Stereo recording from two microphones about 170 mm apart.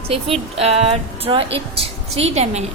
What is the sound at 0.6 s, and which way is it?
Music, 35° right (ahead or behind).